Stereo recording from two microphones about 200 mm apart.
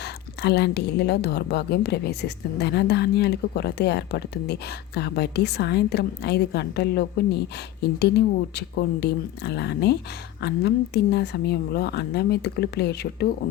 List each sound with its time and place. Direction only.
0.0 s a woman's voice: 55° left (ahead or behind)